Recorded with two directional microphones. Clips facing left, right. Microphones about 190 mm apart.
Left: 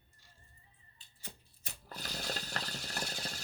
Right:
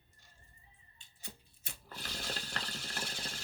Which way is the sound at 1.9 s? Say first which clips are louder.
Left 2 dB; 40° left (ahead or behind).